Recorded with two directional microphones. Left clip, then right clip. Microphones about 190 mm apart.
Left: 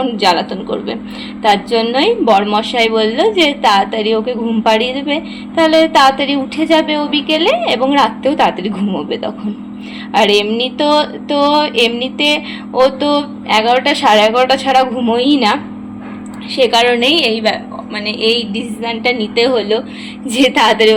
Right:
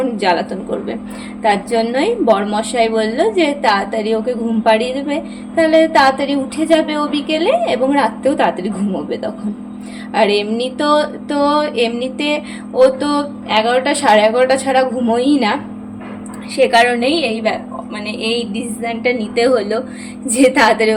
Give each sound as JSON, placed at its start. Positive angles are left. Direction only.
{"t": 0.0, "sound": "a woman's voice", "side_deg": -5}
{"t": 16.6, "sound": "a woman's voice", "side_deg": -5}